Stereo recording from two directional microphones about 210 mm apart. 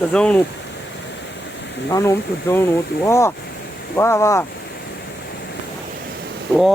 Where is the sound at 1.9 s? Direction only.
15° left (ahead or behind).